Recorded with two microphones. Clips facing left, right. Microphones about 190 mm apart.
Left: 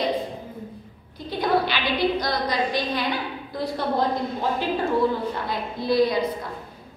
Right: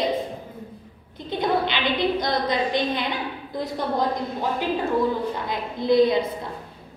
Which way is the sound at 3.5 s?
20° right (ahead or behind).